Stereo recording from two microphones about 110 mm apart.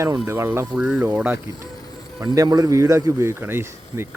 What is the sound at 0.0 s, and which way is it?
Speech, 25° right (ahead or behind).